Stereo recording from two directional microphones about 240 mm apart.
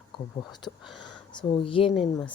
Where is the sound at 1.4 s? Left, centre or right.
Centre.